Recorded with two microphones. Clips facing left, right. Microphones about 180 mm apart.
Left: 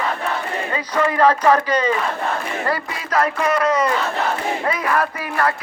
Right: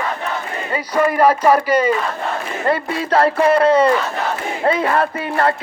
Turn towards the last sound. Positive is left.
turn(degrees=-30)  # may be behind; listen again after turning